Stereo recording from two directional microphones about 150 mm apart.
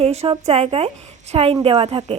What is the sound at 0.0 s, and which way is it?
A woman's voice, 45° right (ahead or behind).